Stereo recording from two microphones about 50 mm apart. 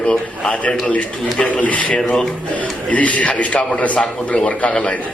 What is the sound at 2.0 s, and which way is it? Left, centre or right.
Speech, centre.